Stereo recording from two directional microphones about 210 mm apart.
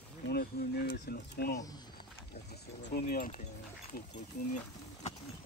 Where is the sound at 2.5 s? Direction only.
50° left (ahead or behind).